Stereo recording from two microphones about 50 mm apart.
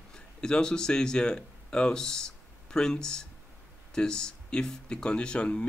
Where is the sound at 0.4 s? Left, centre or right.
Centre.